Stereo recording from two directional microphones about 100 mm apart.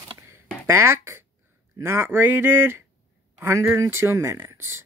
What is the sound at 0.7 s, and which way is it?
Speech, 25° right (ahead or behind).